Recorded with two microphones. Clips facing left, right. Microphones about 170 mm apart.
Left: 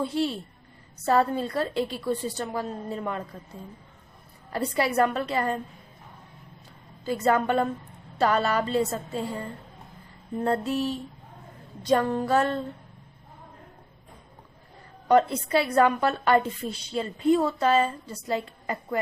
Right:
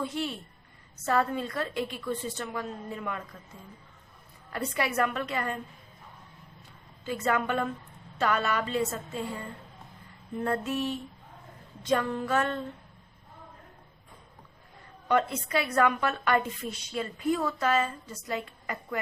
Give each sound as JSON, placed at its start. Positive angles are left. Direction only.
{"t": 0.0, "sound": "a woman's voice", "side_deg": 30}
{"t": 4.5, "sound": "a woman's voice", "side_deg": 35}
{"t": 7.0, "sound": "a woman's voice", "side_deg": 35}
{"t": 10.3, "sound": "a woman's voice", "side_deg": 35}
{"t": 15.0, "sound": "a woman's voice", "side_deg": 35}